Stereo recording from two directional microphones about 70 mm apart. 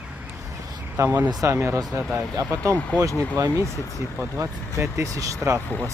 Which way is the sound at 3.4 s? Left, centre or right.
Right.